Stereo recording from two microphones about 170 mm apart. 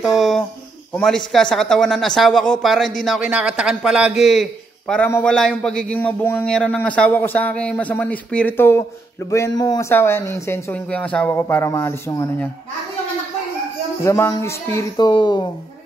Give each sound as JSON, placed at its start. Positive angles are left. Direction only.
{"t": 0.0, "sound": "a sound", "side_deg": 0}
{"t": 0.9, "sound": "a man's voice", "side_deg": 5}
{"t": 14.0, "sound": "a man's voice", "side_deg": 15}
{"t": 15.0, "sound": "speech", "side_deg": 25}